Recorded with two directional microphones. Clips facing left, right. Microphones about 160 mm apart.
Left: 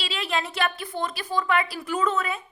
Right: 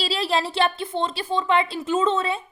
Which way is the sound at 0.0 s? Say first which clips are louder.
Right 5 dB; 35° right (ahead or behind).